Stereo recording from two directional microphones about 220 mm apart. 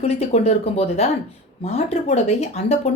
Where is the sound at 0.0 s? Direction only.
30° left (ahead or behind).